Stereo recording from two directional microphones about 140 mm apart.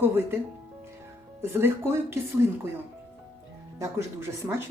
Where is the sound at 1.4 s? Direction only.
15° right (ahead or behind).